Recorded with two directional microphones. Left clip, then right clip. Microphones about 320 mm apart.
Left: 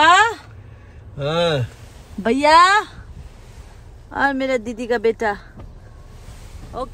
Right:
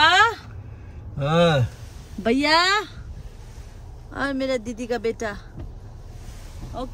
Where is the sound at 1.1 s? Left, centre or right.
Centre.